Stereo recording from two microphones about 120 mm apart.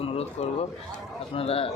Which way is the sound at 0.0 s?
60° left (ahead or behind).